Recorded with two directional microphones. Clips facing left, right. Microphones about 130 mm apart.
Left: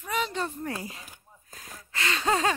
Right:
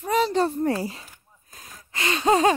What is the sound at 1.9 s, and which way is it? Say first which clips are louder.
Gasp: right 6 dB; 20° right (ahead or behind).